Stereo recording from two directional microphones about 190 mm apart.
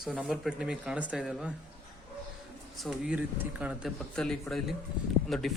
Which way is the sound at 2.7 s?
Centre (ahead or behind).